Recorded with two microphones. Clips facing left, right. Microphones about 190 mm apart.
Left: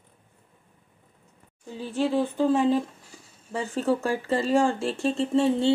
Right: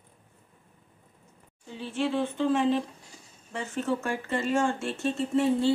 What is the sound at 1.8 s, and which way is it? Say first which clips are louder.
Speech: left 3 dB; 40° left (ahead or behind).